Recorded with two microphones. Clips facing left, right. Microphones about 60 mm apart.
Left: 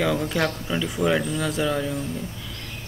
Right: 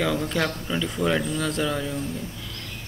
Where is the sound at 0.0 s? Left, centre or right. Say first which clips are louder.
Left 1 dB; centre.